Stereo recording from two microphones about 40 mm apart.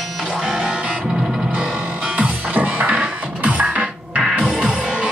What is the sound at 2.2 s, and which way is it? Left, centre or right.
Music, right.